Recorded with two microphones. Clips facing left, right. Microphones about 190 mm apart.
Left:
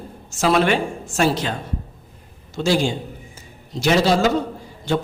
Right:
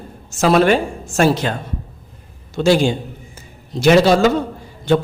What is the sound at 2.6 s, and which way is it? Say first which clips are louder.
Speech: right 6 dB; 65° right (ahead or behind).